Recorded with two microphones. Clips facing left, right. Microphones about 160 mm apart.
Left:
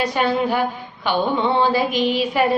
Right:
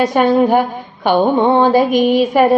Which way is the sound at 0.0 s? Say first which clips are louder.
Right 8 dB; 45° right (ahead or behind).